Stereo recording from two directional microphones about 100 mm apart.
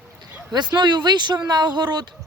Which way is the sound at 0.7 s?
45° right (ahead or behind).